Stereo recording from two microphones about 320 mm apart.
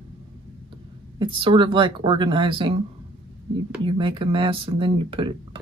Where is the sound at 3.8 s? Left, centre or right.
Centre.